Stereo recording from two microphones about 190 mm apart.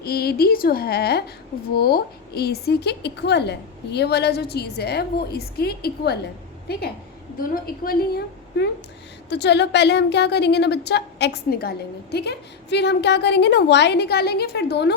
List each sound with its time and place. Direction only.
0.0 s a woman's voice: 55° left (ahead or behind)